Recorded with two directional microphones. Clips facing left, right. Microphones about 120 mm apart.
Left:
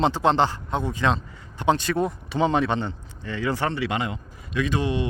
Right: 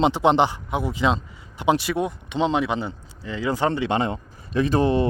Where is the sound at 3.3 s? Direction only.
15° right (ahead or behind); by 5.1 s 35° right (ahead or behind).